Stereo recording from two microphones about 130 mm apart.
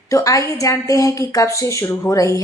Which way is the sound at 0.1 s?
25° left (ahead or behind).